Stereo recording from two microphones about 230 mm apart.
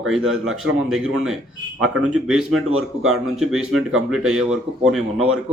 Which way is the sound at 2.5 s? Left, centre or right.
Right.